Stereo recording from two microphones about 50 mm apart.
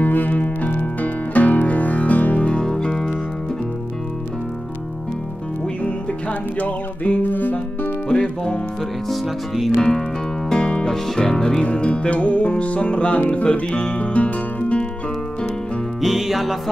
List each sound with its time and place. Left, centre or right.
0.0 s music: left
2.6 s music: centre
6.6 s music: left
8.1 s music: centre
9.8 s speech: centre
10.5 s music: centre
11.6 s music: left
16.0 s music: centre